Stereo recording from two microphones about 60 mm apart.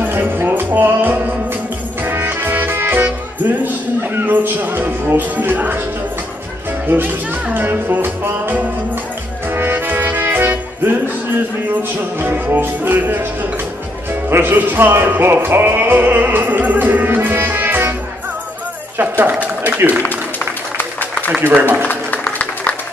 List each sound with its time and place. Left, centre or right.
0.0 s music: right
6.9 s music: right
12.2 s music: right
18.9 s a sound: right
21.5 s music: right
21.8 s music: left